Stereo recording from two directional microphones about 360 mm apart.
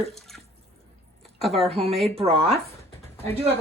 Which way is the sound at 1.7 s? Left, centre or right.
Centre.